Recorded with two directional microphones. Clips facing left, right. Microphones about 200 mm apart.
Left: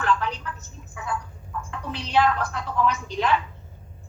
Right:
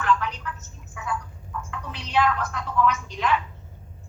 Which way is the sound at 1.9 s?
30° left (ahead or behind).